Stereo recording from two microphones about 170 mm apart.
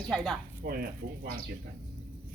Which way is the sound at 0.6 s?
60° right (ahead or behind).